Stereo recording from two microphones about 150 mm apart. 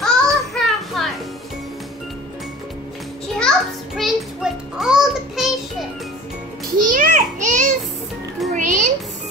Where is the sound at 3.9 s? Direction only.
Centre (ahead or behind).